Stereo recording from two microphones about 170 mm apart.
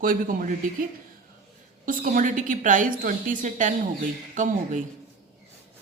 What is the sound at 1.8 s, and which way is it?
A woman's voice, 55° right (ahead or behind).